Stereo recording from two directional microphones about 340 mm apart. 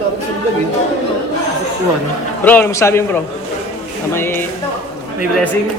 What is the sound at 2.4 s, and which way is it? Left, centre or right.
Speech, centre.